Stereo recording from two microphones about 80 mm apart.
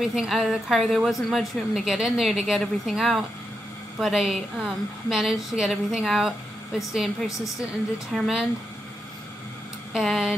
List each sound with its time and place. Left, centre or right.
0.0 s a woman's voice: centre
7.2 s a woman's voice: left
8.1 s a woman's voice: centre
9.9 s a woman's voice: centre